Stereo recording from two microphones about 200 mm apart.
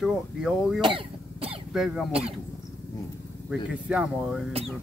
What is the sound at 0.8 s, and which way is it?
Cough, 25° right (ahead or behind).